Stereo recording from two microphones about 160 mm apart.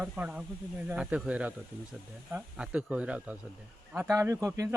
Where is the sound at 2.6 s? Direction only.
5° right (ahead or behind).